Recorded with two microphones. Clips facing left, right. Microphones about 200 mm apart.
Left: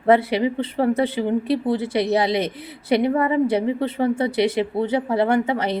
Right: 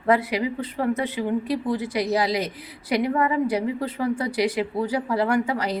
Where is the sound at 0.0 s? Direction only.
30° left (ahead or behind).